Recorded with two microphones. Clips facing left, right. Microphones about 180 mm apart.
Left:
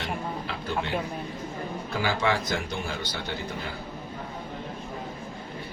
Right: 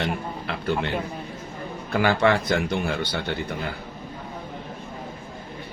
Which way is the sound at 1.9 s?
60° right (ahead or behind).